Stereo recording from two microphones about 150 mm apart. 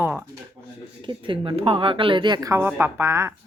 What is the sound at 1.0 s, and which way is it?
Speech, 35° right (ahead or behind).